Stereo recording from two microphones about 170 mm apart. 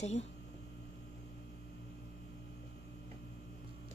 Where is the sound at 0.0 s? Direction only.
40° left (ahead or behind).